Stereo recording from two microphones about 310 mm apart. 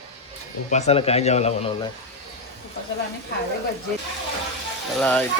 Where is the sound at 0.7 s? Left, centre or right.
Left.